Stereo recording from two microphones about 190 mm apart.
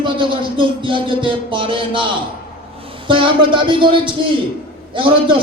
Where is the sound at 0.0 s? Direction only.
25° right (ahead or behind).